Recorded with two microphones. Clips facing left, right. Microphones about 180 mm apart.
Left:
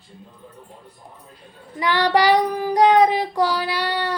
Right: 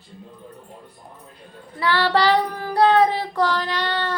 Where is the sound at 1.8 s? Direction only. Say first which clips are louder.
Left 1 dB; 15° left (ahead or behind).